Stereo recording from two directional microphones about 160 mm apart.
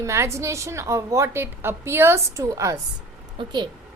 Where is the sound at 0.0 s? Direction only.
20° right (ahead or behind).